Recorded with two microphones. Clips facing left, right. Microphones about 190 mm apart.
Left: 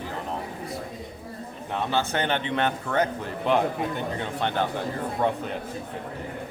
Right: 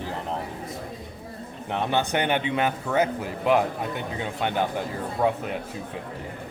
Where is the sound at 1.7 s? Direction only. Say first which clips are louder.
Right 2 dB; 15° right (ahead or behind).